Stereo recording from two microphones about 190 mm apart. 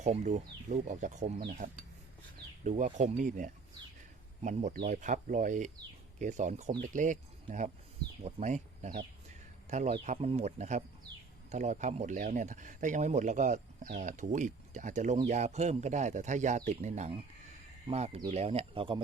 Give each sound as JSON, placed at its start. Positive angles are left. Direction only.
{"t": 0.0, "sound": "speech", "side_deg": -40}
{"t": 1.5, "sound": "cutlery", "side_deg": -45}
{"t": 2.6, "sound": "speech", "side_deg": -40}
{"t": 4.9, "sound": "speech", "side_deg": -40}
{"t": 8.2, "sound": "speech", "side_deg": -35}